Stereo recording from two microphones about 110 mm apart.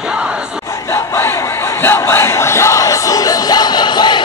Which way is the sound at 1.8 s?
20° left (ahead or behind).